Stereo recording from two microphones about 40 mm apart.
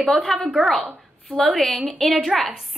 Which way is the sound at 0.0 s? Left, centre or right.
Centre.